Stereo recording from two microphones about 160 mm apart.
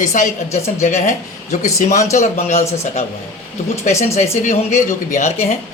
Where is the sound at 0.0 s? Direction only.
50° left (ahead or behind).